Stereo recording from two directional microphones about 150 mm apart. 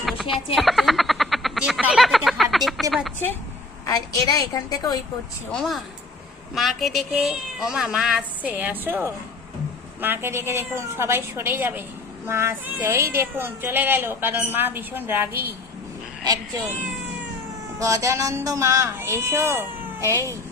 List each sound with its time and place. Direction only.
0.0 s frog: centre (ahead or behind)
0.5 s speech: centre (ahead or behind)
3.8 s a woman's voice: 25° left (ahead or behind)
5.5 s speech: centre (ahead or behind); by 15.4 s 15° right (ahead or behind)
17.7 s speech: 20° right (ahead or behind)